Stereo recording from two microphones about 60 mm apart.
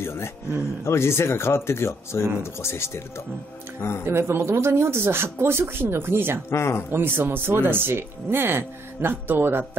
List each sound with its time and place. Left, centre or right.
0.0 s speech: left
4.0 s speech: right
6.5 s speech: left
6.9 s speech: right